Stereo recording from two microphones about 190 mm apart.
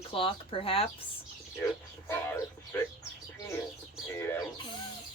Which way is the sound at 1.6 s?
15° left (ahead or behind).